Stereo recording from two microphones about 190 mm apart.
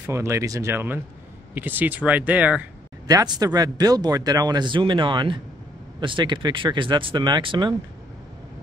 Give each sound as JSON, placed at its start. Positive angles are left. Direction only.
{"t": 0.0, "sound": "speech", "side_deg": -15}
{"t": 3.1, "sound": "speech", "side_deg": -20}